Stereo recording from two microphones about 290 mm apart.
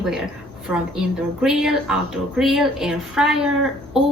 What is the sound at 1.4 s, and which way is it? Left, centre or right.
A woman's voice, centre.